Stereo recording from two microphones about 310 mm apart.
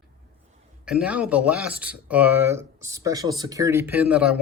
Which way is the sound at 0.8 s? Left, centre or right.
Centre.